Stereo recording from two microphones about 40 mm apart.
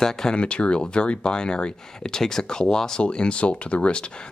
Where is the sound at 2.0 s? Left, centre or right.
Centre.